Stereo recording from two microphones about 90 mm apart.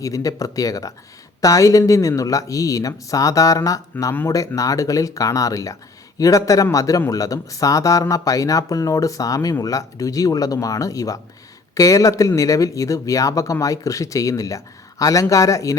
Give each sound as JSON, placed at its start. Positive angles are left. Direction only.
{"t": 0.0, "sound": "speech", "side_deg": 40}